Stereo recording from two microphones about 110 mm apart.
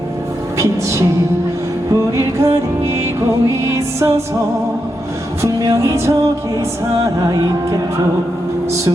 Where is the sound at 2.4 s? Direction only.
25° right (ahead or behind).